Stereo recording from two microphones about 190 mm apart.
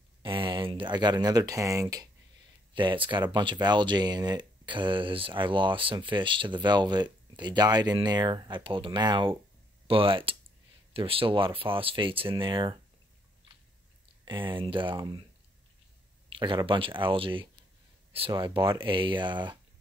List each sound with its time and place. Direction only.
0.2 s speech: 25° right (ahead or behind)
14.2 s speech: 25° right (ahead or behind)
16.3 s speech: 25° right (ahead or behind)